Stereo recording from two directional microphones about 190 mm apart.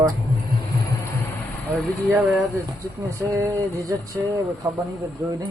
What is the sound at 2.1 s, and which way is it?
Speech, 10° right (ahead or behind).